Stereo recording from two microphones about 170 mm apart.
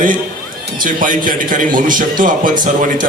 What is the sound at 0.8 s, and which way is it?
A man's voice, 55° right (ahead or behind).